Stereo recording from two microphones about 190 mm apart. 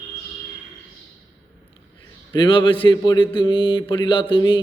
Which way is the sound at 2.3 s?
25° left (ahead or behind).